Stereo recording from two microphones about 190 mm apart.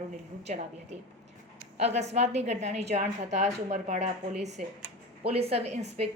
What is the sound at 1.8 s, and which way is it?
A woman's voice, 35° right (ahead or behind).